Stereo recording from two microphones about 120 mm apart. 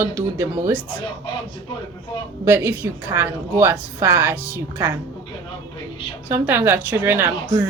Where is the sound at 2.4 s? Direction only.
20° right (ahead or behind).